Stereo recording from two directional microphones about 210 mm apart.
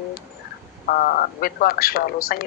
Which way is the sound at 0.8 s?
40° left (ahead or behind).